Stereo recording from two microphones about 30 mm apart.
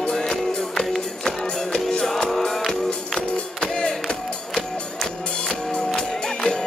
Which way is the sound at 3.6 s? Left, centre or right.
Left.